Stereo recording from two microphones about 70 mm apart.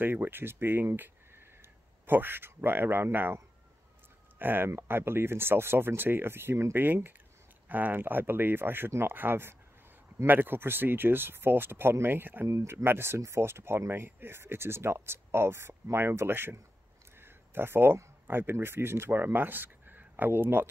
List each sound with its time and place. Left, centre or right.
0.0 s speech: right
4.4 s speech: right
12.4 s speech: right
12.7 s speech: right
17.2 s a sound: right
18.2 s speech: right